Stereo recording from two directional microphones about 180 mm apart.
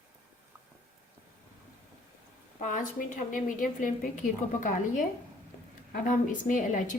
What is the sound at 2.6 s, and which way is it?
A woman's voice, 45° left (ahead or behind).